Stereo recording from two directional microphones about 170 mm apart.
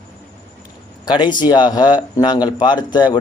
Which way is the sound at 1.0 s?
25° left (ahead or behind).